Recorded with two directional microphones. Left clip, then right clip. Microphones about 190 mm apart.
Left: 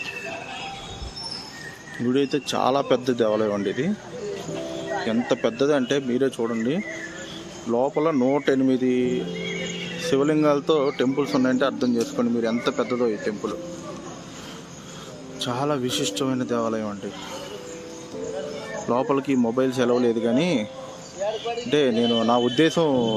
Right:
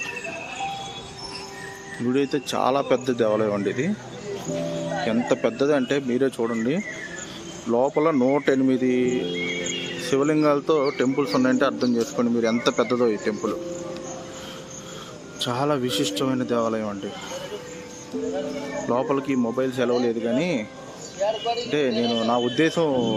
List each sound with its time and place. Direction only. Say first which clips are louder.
2.0 s a man's voice: left 1 dB; 10° left (ahead or behind)
5.0 s a man's voice: right 1 dB; 5° left (ahead or behind); by 13.5 s 15° right (ahead or behind)
15.4 s a man's voice: right 1 dB; 5° right (ahead or behind)
18.9 s speech: left 1 dB; 15° left (ahead or behind); by 20.7 s 30° left (ahead or behind)
21.7 s speech: left 5 dB; 30° left (ahead or behind)
22.3 s speech: left 1 dB; 20° left (ahead or behind)